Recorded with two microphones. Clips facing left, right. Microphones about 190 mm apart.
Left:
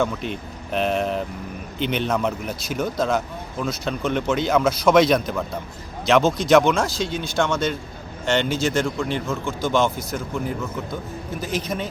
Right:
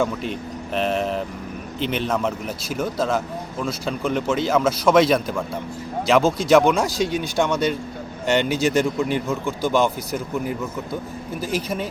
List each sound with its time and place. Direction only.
0.0 s speech: centre (ahead or behind)